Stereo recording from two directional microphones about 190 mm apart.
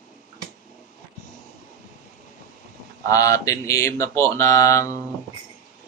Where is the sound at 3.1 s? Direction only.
15° left (ahead or behind).